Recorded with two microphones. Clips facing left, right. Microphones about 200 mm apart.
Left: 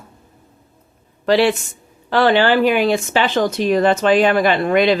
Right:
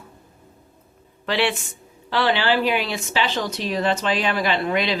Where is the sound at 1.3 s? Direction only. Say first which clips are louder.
Left 8 dB; 40° left (ahead or behind).